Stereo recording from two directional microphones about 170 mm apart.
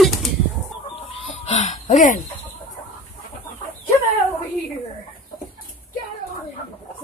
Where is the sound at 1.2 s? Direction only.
40° left (ahead or behind).